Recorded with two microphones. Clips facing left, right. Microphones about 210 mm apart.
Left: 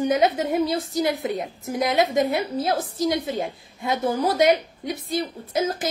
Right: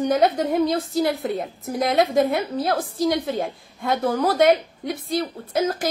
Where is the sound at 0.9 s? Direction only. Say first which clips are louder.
Right 2 dB; 15° left (ahead or behind).